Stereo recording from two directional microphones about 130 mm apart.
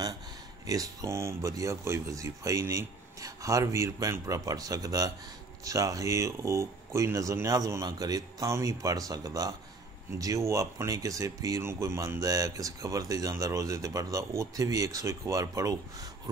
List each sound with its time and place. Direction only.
0.7 s speech: 25° right (ahead or behind)